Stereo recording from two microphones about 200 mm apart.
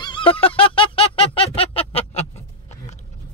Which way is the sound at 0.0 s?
25° left (ahead or behind).